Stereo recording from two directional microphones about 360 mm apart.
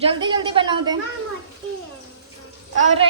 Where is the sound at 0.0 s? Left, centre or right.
Centre.